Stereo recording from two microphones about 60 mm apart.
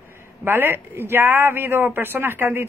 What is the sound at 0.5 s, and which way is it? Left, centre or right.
A man's voice, right.